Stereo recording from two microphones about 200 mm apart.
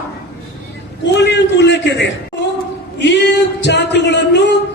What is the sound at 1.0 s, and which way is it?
A man's voice, 60° left (ahead or behind).